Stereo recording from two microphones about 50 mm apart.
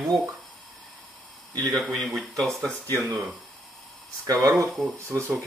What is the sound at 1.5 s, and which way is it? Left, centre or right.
Speech, left.